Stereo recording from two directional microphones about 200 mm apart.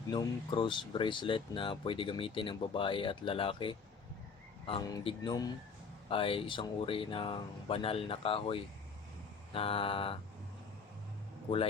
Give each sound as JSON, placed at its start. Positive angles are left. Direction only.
{"t": 0.1, "sound": "speech", "side_deg": 20}